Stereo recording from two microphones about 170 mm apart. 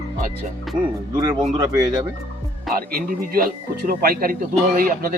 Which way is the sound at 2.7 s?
60° right (ahead or behind).